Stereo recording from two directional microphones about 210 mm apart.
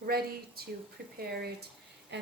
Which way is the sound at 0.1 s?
45° right (ahead or behind).